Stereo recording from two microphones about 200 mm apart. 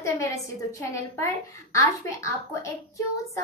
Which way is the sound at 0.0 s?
15° left (ahead or behind).